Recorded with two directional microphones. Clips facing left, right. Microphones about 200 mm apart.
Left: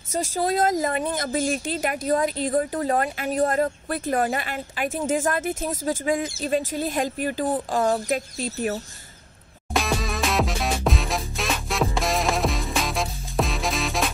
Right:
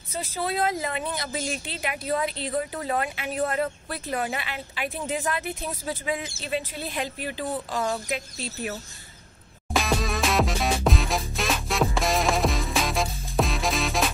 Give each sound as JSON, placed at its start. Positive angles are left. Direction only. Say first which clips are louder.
{"t": 0.1, "sound": "speech", "louder": "left 5 dB", "side_deg": 45}
{"t": 9.8, "sound": "music", "louder": "even", "side_deg": 0}